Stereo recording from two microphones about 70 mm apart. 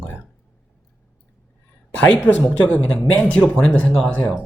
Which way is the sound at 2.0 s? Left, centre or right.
Left.